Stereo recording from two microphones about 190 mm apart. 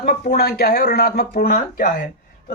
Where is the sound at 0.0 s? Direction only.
50° left (ahead or behind).